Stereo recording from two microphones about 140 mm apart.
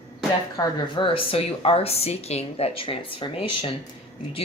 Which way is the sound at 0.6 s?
30° left (ahead or behind).